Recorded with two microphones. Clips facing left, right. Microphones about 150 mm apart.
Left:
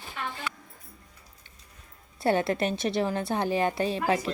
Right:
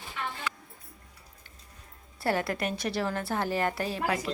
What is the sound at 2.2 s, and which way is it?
A woman's voice, 20° left (ahead or behind).